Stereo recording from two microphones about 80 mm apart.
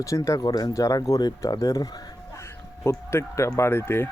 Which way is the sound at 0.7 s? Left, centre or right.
Left.